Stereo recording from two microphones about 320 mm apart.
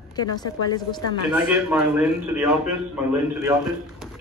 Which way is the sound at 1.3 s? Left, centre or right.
Centre.